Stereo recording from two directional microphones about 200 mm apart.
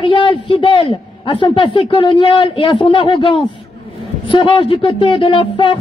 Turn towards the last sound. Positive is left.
turn(degrees=25)  # may be behind; listen again after turning